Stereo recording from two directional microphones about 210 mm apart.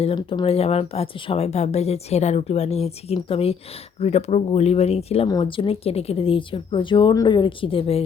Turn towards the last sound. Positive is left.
turn(degrees=25)  # may be behind; listen again after turning